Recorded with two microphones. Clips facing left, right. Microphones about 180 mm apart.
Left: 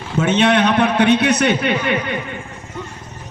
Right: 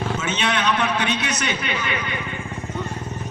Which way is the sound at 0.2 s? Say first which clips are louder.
Left 9 dB; 60° left (ahead or behind).